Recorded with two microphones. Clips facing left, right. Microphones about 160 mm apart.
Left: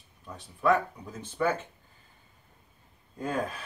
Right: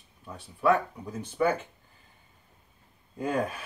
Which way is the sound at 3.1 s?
10° right (ahead or behind).